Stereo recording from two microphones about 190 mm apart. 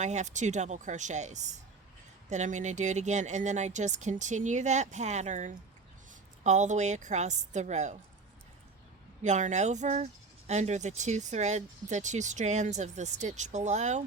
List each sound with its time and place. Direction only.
0.0 s speech: 40° right (ahead or behind)
9.2 s speech: 40° right (ahead or behind)